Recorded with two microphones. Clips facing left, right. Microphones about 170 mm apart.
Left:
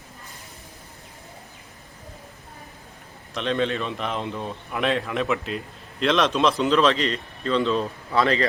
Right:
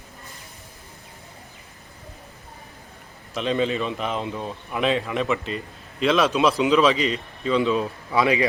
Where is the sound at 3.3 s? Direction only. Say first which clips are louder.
Right 1 dB; 5° right (ahead or behind).